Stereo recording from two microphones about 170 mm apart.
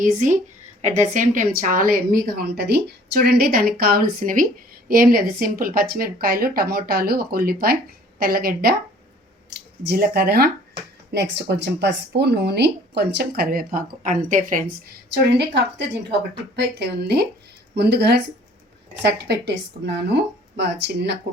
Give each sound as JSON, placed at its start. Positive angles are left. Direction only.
{"t": 0.0, "sound": "a woman's voice", "side_deg": -50}
{"t": 2.3, "sound": "speech", "side_deg": -70}
{"t": 9.8, "sound": "speech", "side_deg": -70}
{"t": 11.1, "sound": "speech", "side_deg": -85}
{"t": 16.0, "sound": "speech", "side_deg": -85}
{"t": 20.6, "sound": "speech", "side_deg": -85}